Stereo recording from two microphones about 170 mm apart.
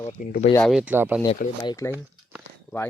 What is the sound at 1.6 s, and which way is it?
Speech, 20° left (ahead or behind).